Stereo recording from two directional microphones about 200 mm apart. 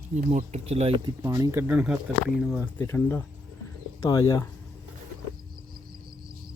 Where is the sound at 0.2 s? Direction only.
35° right (ahead or behind); by 2.6 s centre (ahead or behind).